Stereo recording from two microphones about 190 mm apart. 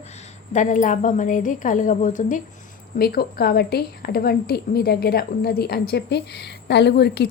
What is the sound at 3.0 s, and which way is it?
A woman's voice, 55° left (ahead or behind).